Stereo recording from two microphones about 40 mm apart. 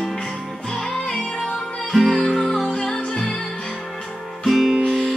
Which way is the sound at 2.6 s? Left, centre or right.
Centre.